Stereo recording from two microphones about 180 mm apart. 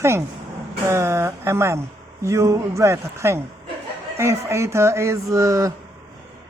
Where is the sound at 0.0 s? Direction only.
15° right (ahead or behind).